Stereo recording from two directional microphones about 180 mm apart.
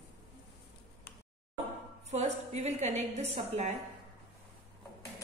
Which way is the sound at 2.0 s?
40° right (ahead or behind).